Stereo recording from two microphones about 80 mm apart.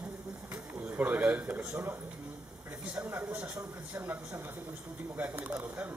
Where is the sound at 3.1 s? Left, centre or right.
Right.